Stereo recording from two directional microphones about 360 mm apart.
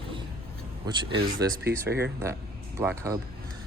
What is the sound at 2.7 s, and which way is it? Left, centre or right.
Speech, centre.